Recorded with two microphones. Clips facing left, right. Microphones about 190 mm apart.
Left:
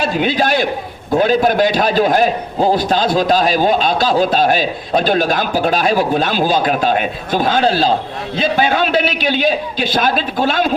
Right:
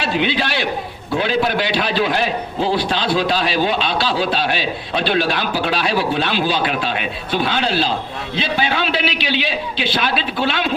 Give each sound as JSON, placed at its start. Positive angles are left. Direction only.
{"t": 0.0, "sound": "a man's voice", "side_deg": 45}